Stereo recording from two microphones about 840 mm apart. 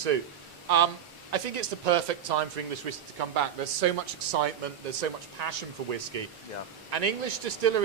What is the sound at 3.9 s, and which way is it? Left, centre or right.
Speech, right.